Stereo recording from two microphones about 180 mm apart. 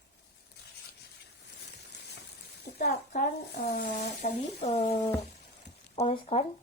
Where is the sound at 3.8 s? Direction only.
40° left (ahead or behind).